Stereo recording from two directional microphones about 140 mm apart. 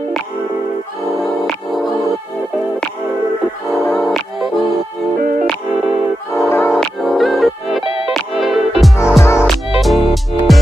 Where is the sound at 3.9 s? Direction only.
Centre (ahead or behind).